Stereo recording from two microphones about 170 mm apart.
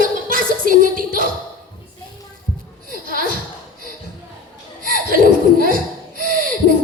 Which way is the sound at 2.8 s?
55° right (ahead or behind).